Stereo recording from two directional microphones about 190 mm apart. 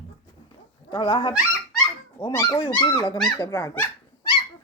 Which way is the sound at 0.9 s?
25° left (ahead or behind).